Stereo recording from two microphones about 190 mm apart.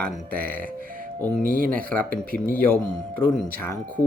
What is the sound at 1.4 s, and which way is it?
Speech, 50° right (ahead or behind).